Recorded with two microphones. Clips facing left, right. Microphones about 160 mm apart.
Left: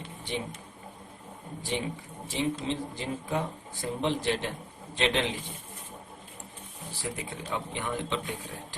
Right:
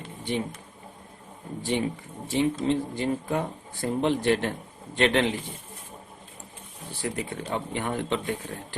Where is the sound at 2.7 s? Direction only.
55° right (ahead or behind).